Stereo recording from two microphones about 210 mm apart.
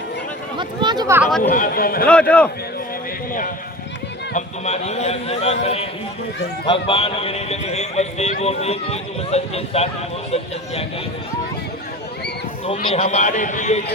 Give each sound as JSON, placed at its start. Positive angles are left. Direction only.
{"t": 0.5, "sound": "speech", "side_deg": -20}
{"t": 1.4, "sound": "speech", "side_deg": 40}
{"t": 2.3, "sound": "a man's voice", "side_deg": 5}
{"t": 4.4, "sound": "a man's voice", "side_deg": 30}
{"t": 12.6, "sound": "a man's voice", "side_deg": 30}